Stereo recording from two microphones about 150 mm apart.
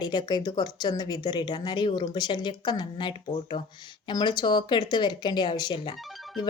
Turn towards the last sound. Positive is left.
turn(degrees=0)  # may be behind; listen again after turning